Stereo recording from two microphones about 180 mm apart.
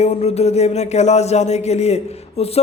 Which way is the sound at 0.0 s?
35° left (ahead or behind).